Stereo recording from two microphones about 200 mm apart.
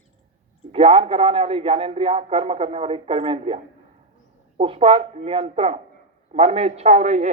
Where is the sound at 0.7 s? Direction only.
30° right (ahead or behind).